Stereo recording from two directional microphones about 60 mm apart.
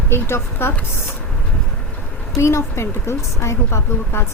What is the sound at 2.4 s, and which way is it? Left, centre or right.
Speech, left.